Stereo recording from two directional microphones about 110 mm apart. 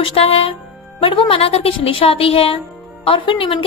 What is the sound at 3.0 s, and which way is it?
Speech, 50° left (ahead or behind).